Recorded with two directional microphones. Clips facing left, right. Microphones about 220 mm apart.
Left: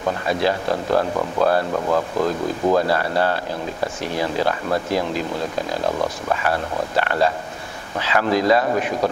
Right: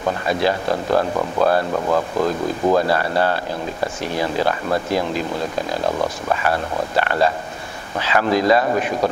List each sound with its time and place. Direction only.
0.3 s speech: 15° right (ahead or behind)
0.7 s speech: 25° right (ahead or behind)